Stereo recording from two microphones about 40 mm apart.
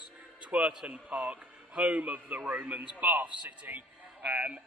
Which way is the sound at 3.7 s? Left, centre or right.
Right.